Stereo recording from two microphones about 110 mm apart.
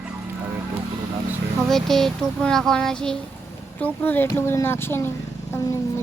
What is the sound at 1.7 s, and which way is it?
Speech, 5° left (ahead or behind).